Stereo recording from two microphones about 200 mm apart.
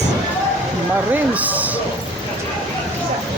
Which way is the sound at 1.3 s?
10° right (ahead or behind).